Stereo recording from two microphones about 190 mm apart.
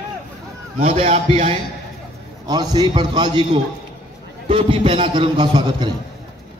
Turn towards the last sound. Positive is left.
turn(degrees=-25)  # may be behind; listen again after turning